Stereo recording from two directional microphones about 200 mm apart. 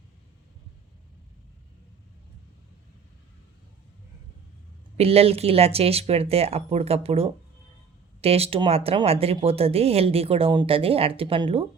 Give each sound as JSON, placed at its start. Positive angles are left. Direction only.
{"t": 4.9, "sound": "speech", "side_deg": -30}